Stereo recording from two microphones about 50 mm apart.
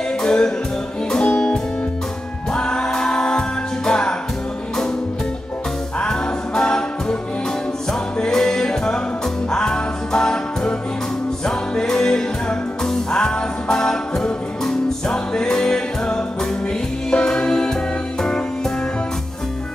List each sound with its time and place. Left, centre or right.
0.2 s music: centre
5.9 s music: centre
8.2 s music: centre